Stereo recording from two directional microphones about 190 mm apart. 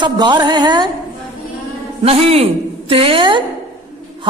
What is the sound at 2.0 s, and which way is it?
A woman's voice, 30° right (ahead or behind).